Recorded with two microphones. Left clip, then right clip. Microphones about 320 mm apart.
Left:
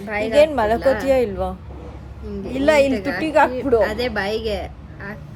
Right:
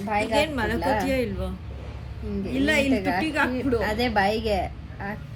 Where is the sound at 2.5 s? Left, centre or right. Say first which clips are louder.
Left 8 dB; centre.